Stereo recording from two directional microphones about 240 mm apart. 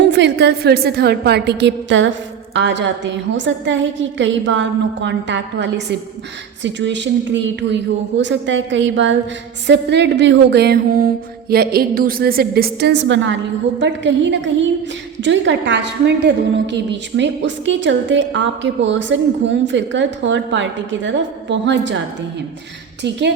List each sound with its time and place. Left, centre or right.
0.0 s a woman's voice: right